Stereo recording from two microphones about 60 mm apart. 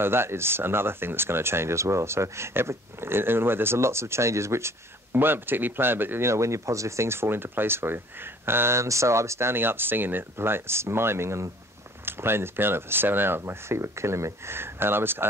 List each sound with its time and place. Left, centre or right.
0.0 s speech: right
5.1 s speech: right
6.2 s speech: right